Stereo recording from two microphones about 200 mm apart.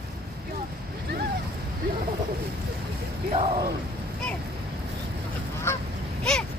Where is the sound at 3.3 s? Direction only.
30° right (ahead or behind).